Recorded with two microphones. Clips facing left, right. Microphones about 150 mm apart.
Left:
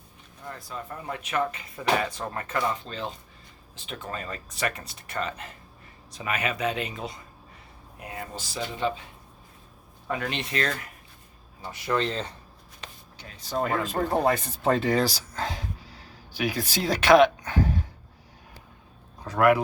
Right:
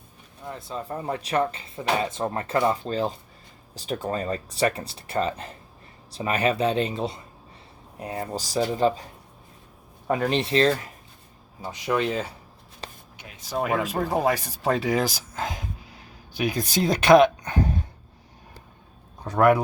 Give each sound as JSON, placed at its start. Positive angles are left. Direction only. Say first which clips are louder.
{"t": 0.4, "sound": "speech", "louder": "right 4 dB", "side_deg": -20}
{"t": 10.1, "sound": "speech", "louder": "right 7 dB", "side_deg": -35}
{"t": 11.6, "sound": "speech", "louder": "right 2 dB", "side_deg": -15}
{"t": 12.8, "sound": "a sound", "louder": "right 5 dB", "side_deg": -35}
{"t": 13.2, "sound": "speech", "louder": "right 1 dB", "side_deg": -15}
{"t": 19.2, "sound": "speech", "louder": "right 2 dB", "side_deg": -20}